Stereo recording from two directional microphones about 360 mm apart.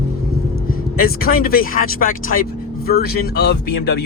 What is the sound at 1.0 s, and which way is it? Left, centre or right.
Speech, left.